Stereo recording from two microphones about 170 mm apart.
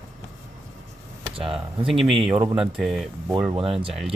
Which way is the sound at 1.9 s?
Centre (ahead or behind).